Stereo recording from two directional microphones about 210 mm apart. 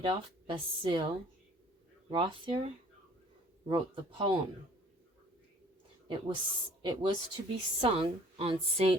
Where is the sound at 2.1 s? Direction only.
25° right (ahead or behind).